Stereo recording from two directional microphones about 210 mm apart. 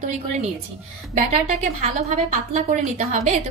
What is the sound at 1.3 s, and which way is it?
A woman's voice, 30° right (ahead or behind).